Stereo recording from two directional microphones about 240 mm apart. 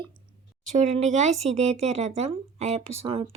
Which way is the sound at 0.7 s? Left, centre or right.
Right.